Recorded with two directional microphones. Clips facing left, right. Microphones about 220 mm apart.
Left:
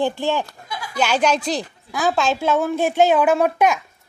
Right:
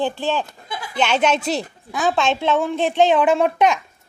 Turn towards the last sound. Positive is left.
turn(degrees=0)  # may be behind; listen again after turning